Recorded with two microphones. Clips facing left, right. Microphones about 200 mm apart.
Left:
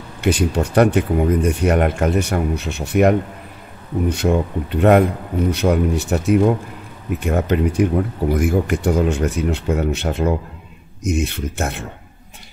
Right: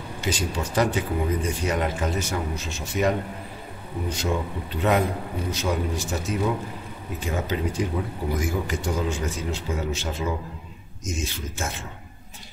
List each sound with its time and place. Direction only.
0.2 s speech: 60° left (ahead or behind)